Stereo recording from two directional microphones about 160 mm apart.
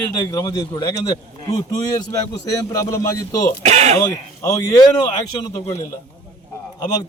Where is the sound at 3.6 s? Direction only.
45° right (ahead or behind).